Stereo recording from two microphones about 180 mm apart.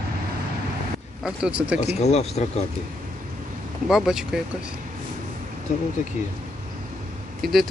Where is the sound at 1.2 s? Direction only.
5° right (ahead or behind).